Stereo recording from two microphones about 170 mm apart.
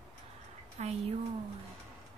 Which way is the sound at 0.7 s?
40° right (ahead or behind).